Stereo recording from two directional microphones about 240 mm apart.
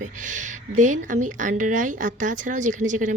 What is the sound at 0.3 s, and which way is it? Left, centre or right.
A woman's voice, right.